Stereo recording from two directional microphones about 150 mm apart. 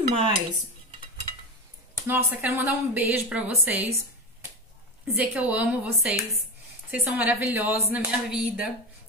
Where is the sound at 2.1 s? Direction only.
10° right (ahead or behind).